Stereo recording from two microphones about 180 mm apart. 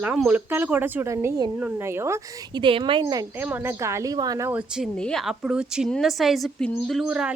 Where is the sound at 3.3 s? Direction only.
10° right (ahead or behind).